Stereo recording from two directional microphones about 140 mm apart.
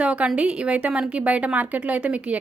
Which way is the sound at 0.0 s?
10° right (ahead or behind).